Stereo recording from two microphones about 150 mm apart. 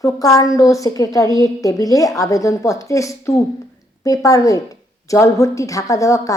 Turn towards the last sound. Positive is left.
turn(degrees=20)  # may be behind; listen again after turning